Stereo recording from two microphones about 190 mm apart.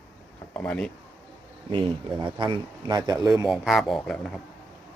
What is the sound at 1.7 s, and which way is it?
A man's voice, 25° right (ahead or behind).